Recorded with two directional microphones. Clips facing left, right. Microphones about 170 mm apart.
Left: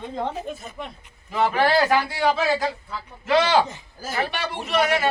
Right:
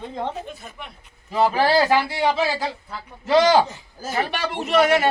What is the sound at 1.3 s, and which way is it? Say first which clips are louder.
A man's voice: right 2 dB; 35° right (ahead or behind).